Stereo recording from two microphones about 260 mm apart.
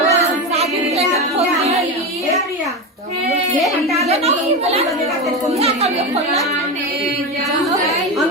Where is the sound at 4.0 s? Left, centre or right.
Right.